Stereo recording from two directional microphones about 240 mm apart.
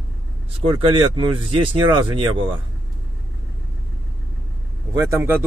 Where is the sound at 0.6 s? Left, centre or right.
Right.